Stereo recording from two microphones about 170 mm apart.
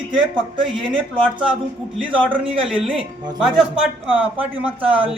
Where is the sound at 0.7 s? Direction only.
30° right (ahead or behind).